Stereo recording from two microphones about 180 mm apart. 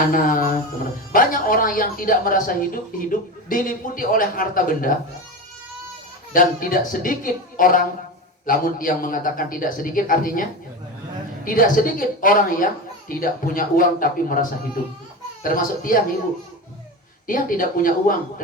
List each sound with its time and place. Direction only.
0.1 s a woman's voice: 50° left (ahead or behind)
6.3 s a woman's voice: 50° left (ahead or behind)
11.4 s a woman's voice: 50° left (ahead or behind)
15.4 s a woman's voice: 50° left (ahead or behind)
17.2 s a woman's voice: 50° left (ahead or behind)